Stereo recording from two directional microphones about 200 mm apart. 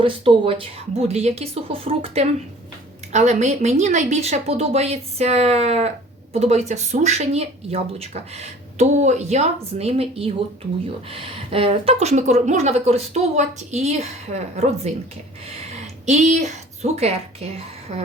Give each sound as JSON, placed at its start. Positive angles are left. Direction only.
{"t": 0.0, "sound": "speech", "side_deg": -25}